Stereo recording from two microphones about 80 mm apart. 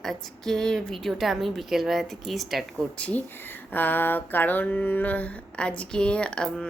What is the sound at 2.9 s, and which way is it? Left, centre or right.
Mantra, centre.